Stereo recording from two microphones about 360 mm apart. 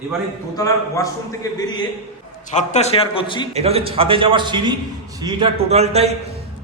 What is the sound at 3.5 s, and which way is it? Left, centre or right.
A man's voice, centre.